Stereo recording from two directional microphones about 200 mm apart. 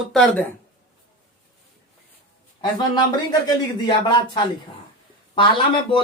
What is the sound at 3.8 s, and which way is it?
Speech, 20° left (ahead or behind).